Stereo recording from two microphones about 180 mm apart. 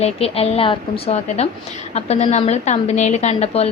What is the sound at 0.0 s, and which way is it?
A woman's voice, 35° left (ahead or behind).